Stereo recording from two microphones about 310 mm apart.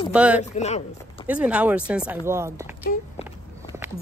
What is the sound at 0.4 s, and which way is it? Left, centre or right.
Speech, left.